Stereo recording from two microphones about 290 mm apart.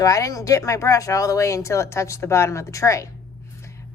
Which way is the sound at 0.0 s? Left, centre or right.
Centre.